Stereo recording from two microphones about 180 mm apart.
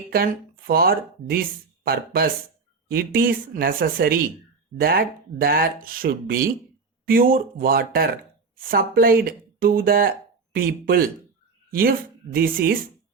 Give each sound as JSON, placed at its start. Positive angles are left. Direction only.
{"t": 0.7, "sound": "speech", "side_deg": -55}